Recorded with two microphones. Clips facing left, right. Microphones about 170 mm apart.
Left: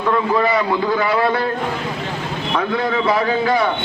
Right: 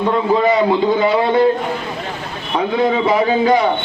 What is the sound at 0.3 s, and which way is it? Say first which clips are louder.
A man's voice: right 4 dB; 20° right (ahead or behind).